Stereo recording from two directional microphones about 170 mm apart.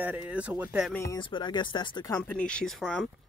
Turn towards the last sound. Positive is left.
turn(degrees=0)  # may be behind; listen again after turning